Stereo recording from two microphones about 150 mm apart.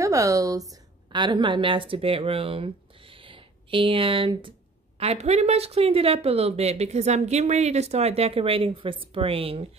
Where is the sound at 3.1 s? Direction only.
35° right (ahead or behind).